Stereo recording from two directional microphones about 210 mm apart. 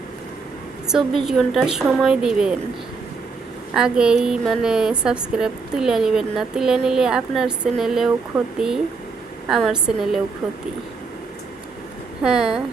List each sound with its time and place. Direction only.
0.9 s a woman's voice: centre (ahead or behind)
3.8 s a woman's voice: 5° right (ahead or behind)
12.2 s a woman's voice: 5° right (ahead or behind)